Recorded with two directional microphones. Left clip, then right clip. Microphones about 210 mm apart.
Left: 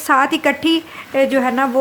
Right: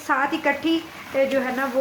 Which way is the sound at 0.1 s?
45° left (ahead or behind).